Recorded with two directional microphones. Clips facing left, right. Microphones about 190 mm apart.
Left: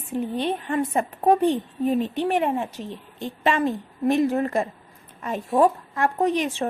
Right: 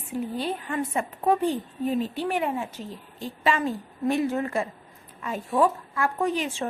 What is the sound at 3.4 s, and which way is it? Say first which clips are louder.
Speech: left 3 dB; 50° left (ahead or behind).